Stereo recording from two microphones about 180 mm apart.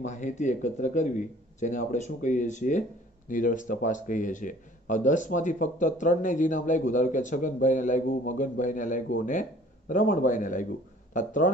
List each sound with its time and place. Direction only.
0.0 s a man's voice: 40° left (ahead or behind)